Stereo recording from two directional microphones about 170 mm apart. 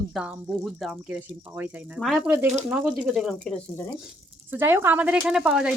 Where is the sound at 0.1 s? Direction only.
5° right (ahead or behind).